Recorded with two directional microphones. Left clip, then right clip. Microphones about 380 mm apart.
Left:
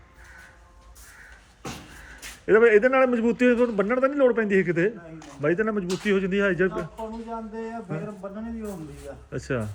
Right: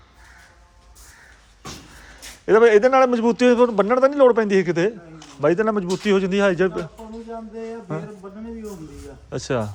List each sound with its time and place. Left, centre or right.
2.5 s a man's voice: centre
9.3 s a man's voice: centre